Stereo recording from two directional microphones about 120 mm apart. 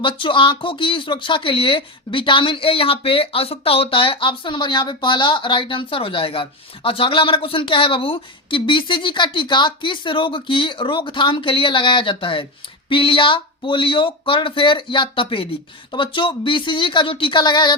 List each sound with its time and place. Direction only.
0.0 s speech: 45° left (ahead or behind)